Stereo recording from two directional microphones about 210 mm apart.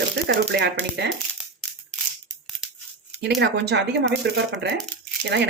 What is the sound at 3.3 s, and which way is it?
Speech, 55° right (ahead or behind).